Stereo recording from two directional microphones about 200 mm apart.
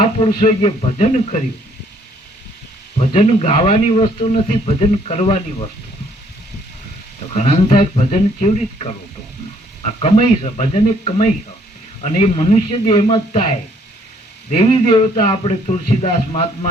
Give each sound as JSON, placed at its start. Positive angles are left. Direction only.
{"t": 0.2, "sound": "a man's voice", "side_deg": 30}
{"t": 3.0, "sound": "a man's voice", "side_deg": 30}
{"t": 7.3, "sound": "a man's voice", "side_deg": 30}
{"t": 14.5, "sound": "a man's voice", "side_deg": 30}